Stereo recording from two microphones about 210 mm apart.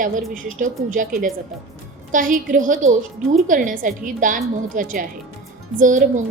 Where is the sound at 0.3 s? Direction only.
35° right (ahead or behind).